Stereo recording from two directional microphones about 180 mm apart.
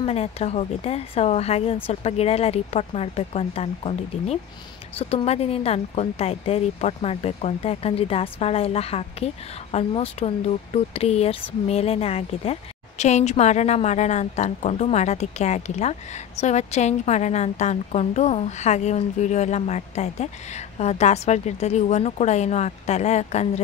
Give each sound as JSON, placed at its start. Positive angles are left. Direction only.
{"t": 0.0, "sound": "speech", "side_deg": 35}